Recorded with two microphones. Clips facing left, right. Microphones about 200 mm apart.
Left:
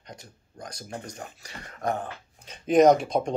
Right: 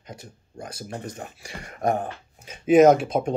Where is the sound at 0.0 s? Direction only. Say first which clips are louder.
Right 4 dB; 5° right (ahead or behind).